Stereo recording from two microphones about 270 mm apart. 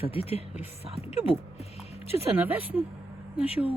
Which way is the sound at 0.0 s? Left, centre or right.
Left.